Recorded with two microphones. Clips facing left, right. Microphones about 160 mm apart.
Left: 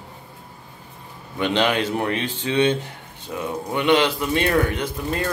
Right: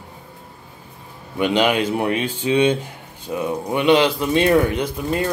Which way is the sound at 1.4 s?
10° right (ahead or behind).